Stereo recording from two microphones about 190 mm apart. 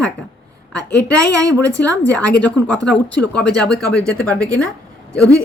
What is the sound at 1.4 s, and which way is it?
Speech, 15° right (ahead or behind).